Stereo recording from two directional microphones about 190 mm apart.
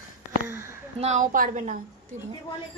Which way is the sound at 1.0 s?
40° right (ahead or behind).